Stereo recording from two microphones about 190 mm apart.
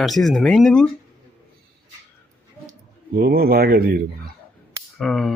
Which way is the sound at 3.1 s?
55° right (ahead or behind).